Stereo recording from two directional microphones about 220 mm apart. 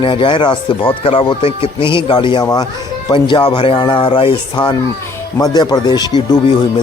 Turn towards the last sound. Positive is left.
turn(degrees=20)  # may be behind; listen again after turning